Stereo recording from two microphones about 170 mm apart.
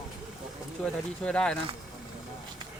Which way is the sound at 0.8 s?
5° left (ahead or behind).